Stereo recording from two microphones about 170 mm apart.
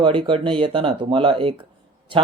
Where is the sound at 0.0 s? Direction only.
30° right (ahead or behind).